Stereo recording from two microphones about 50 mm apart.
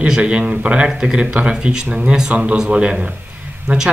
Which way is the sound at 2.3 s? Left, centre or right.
Right.